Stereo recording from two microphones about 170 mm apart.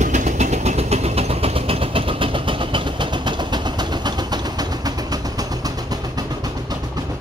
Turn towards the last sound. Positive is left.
turn(degrees=-20)  # may be behind; listen again after turning